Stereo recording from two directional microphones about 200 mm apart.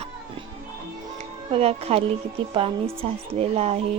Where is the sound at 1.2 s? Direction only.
30° right (ahead or behind).